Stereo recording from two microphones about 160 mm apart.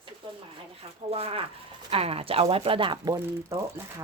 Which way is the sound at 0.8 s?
35° right (ahead or behind).